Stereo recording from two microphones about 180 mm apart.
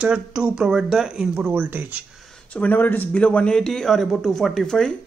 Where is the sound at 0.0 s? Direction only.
5° right (ahead or behind).